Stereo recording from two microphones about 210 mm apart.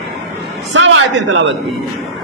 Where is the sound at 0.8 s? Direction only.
60° right (ahead or behind).